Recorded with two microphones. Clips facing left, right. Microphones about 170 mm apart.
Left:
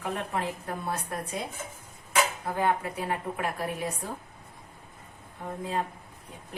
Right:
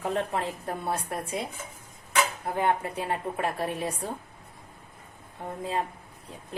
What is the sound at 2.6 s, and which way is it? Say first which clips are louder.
Speech: right 1 dB; 30° right (ahead or behind).